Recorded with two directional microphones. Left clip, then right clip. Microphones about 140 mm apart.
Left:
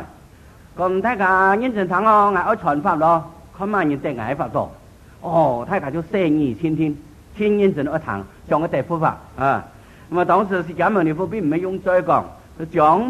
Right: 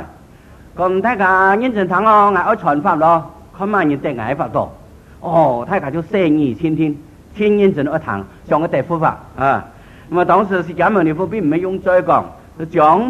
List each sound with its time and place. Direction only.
0.7 s a man's voice: 35° right (ahead or behind)